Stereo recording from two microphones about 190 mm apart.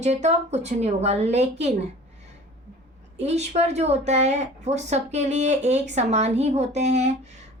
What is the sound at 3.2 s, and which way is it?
A woman's voice, 35° right (ahead or behind).